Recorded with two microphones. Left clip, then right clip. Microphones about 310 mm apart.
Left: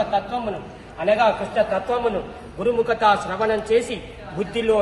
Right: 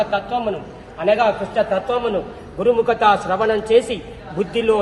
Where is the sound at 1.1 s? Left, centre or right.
Centre.